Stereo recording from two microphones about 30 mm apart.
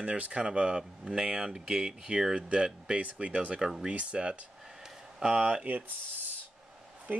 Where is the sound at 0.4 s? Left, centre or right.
Right.